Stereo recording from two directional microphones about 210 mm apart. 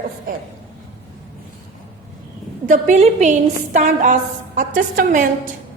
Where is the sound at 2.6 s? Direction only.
35° right (ahead or behind).